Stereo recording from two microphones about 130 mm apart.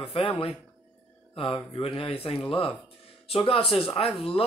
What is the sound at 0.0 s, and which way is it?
Speech, 50° left (ahead or behind).